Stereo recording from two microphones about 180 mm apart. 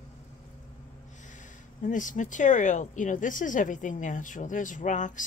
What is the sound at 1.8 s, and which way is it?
Speech, 45° left (ahead or behind).